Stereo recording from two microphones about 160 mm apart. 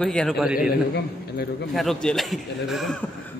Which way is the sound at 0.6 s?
85° left.